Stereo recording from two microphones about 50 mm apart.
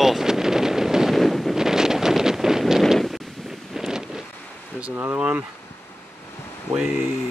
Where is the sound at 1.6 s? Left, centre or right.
Centre.